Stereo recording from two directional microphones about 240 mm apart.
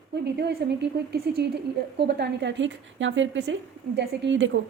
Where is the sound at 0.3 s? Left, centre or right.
Right.